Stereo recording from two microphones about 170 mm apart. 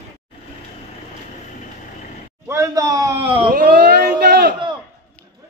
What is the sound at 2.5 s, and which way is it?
Speech, 20° right (ahead or behind).